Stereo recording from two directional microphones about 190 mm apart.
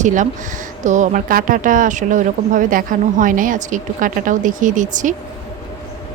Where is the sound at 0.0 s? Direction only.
40° right (ahead or behind).